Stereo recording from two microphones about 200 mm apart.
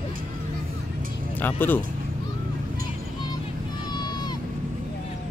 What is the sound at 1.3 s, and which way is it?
Speech, 10° left (ahead or behind).